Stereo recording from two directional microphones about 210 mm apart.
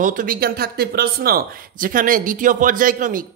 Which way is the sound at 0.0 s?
40° right (ahead or behind).